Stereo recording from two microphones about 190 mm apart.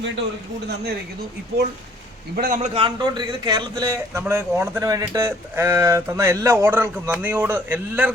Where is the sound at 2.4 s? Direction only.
50° right (ahead or behind).